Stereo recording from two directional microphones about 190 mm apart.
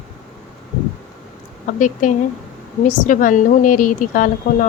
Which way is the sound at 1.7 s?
40° left (ahead or behind).